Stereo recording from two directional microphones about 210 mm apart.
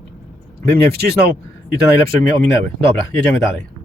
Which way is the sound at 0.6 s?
50° right (ahead or behind).